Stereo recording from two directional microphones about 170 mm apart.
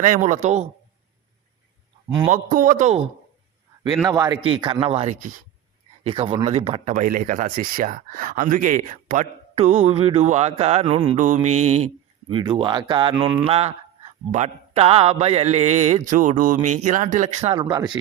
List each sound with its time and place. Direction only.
0.0 s speech: 50° right (ahead or behind)
2.3 s speech: 50° right (ahead or behind)
4.0 s speech: 20° right (ahead or behind); by 6.9 s 35° right (ahead or behind)
6.9 s speech: 50° right (ahead or behind)
12.3 s speech: 30° right (ahead or behind)
17.7 s speech: 20° right (ahead or behind)